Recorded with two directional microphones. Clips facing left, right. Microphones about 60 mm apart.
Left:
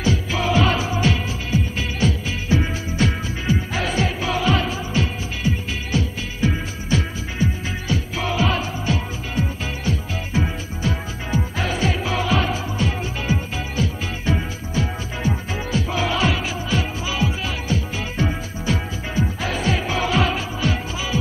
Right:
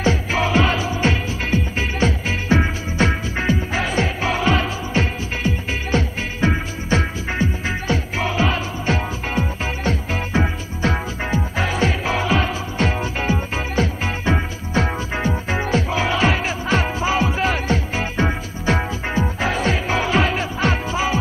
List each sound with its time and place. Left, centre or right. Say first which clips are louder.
0.0 s music: right 3 dB; right